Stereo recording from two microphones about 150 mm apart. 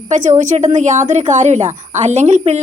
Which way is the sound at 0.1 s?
55° right (ahead or behind).